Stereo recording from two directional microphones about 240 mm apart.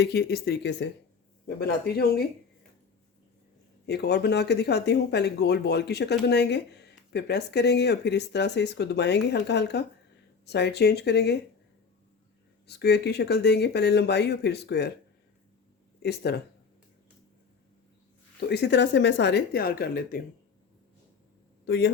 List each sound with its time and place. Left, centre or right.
0.0 s speech: left
3.8 s speech: left
12.6 s speech: left
16.0 s speech: left
18.3 s speech: left